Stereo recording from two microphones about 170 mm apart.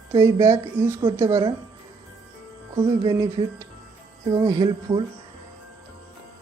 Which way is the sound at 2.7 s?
25° right (ahead or behind).